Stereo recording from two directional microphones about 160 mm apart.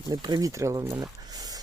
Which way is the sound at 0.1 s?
25° right (ahead or behind).